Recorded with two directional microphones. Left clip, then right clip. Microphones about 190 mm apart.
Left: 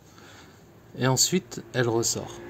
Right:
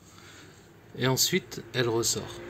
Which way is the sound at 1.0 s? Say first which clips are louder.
Left 2 dB; 60° left (ahead or behind).